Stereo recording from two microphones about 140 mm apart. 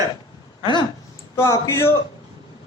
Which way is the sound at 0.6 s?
35° left (ahead or behind).